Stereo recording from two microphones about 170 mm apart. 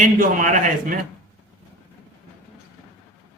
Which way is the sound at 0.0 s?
50° right (ahead or behind).